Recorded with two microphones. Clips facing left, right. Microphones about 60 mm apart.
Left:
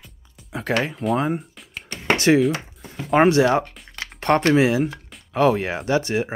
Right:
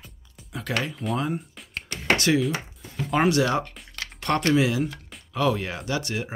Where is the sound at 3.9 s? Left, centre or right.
Left.